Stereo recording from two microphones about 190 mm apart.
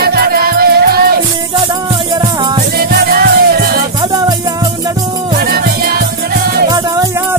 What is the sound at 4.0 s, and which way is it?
Music, 20° right (ahead or behind).